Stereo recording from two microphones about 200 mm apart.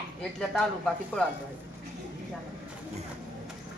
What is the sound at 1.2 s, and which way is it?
Speech, 5° left (ahead or behind).